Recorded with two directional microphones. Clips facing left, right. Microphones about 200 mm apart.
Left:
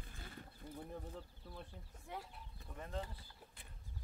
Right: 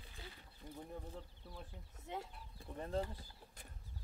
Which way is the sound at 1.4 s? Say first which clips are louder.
Left 1 dB; 10° right (ahead or behind).